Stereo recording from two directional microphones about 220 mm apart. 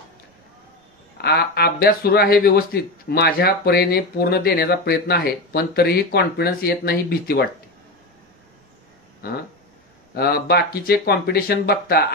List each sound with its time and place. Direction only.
1.1 s speech: 45° left (ahead or behind)
9.2 s speech: 45° left (ahead or behind)